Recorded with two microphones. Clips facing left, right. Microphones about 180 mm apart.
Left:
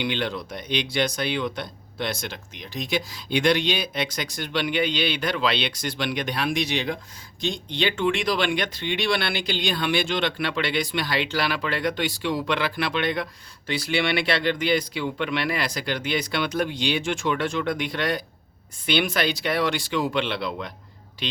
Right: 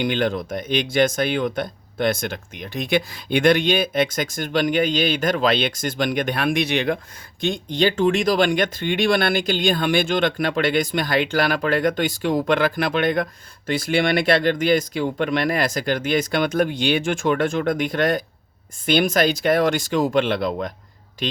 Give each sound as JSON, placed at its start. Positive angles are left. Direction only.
{"t": 0.0, "sound": "speech", "side_deg": -50}